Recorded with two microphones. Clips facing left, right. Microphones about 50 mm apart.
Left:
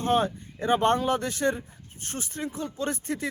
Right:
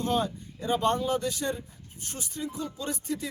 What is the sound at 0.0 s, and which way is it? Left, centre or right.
Speech, left.